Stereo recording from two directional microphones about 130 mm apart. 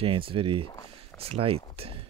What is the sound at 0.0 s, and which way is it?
Speech, 45° right (ahead or behind).